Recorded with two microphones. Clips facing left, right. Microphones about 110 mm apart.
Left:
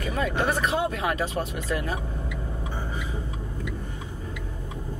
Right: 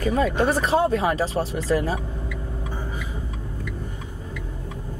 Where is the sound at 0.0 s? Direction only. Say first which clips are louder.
Right 5 dB; 35° right (ahead or behind).